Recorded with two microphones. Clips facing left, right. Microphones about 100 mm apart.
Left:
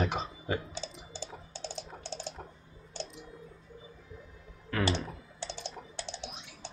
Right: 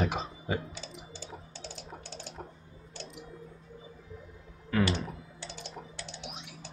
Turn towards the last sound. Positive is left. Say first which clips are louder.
# left 2 dB
turn(degrees=30)  # may be behind; listen again after turning